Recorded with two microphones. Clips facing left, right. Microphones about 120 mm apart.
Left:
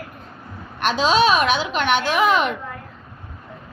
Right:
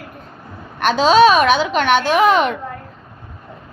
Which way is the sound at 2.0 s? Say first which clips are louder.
Right 4 dB; 30° right (ahead or behind).